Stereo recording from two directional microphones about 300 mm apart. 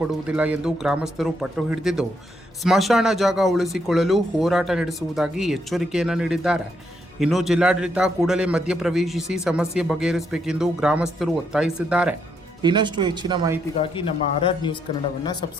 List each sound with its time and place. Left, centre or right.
0.1 s a man's voice: centre
12.6 s speech: centre
13.7 s speech: centre